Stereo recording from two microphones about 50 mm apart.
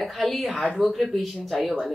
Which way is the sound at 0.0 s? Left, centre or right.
Centre.